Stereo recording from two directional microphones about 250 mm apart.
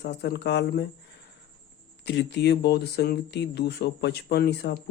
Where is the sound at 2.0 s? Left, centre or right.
Left.